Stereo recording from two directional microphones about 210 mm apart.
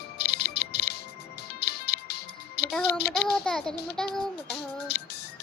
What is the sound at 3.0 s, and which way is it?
Speech, 50° left (ahead or behind).